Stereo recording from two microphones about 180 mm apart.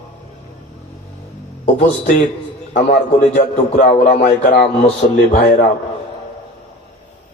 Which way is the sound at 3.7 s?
45° left (ahead or behind).